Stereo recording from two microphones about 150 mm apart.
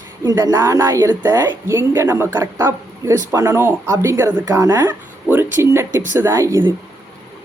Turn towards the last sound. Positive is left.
turn(degrees=-20)  # may be behind; listen again after turning